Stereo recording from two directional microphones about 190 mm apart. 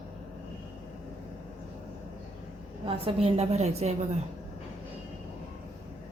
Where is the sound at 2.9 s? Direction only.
30° right (ahead or behind).